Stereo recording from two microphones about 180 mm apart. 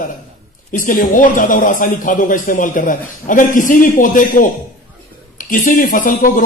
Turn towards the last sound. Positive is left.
turn(degrees=50)  # may be behind; listen again after turning